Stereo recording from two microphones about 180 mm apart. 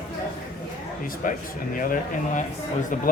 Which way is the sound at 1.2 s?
50° left (ahead or behind).